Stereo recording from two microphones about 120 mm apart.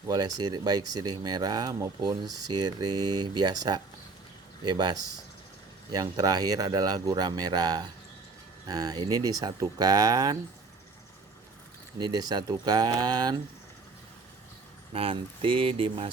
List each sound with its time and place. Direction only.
0.1 s speech: 35° right (ahead or behind)
11.9 s speech: 35° right (ahead or behind)
14.9 s speech: 50° right (ahead or behind)